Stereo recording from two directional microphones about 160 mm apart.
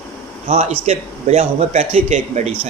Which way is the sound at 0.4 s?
45° right (ahead or behind).